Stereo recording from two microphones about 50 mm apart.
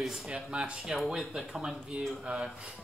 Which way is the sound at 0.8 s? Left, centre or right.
Centre.